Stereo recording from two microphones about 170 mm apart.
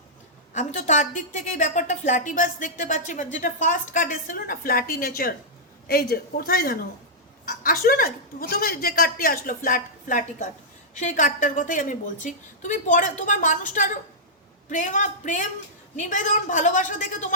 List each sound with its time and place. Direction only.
0.5 s a woman's voice: 45° left (ahead or behind)